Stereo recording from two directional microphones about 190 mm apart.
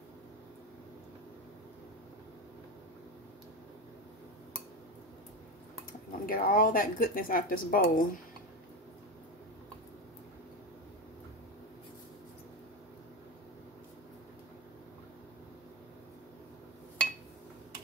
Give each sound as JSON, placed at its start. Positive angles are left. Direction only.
{"t": 6.2, "sound": "speech", "side_deg": 45}